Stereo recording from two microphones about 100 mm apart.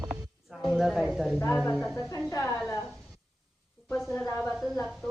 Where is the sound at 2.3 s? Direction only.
30° left (ahead or behind).